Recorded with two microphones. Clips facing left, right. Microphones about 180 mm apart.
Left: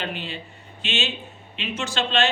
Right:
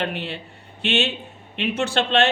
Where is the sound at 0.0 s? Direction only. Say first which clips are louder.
Right 4 dB; 65° right (ahead or behind).